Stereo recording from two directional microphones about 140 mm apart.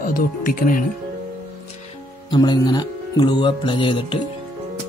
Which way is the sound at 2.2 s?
30° left (ahead or behind).